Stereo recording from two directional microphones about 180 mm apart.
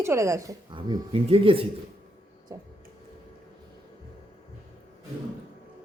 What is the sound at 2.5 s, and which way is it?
Speech, 15° right (ahead or behind).